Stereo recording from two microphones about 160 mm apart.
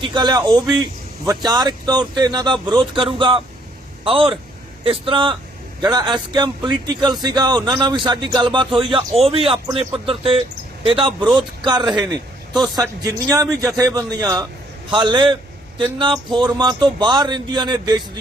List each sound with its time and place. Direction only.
0.0 s a man's voice: 30° right (ahead or behind)
4.0 s music: 35° right (ahead or behind)
5.8 s a man's voice: 25° right (ahead or behind)
9.7 s music: 35° right (ahead or behind)
11.3 s speech: 30° right (ahead or behind)
11.8 s a man's voice: centre (ahead or behind)
13.0 s a man's voice: 20° right (ahead or behind)
14.8 s music: 30° right (ahead or behind)
16.3 s a man's voice: 30° right (ahead or behind)